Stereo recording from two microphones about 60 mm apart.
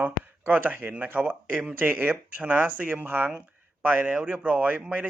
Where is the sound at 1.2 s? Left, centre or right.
Right.